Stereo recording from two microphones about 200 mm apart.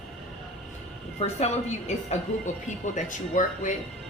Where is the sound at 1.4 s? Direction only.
35° left (ahead or behind).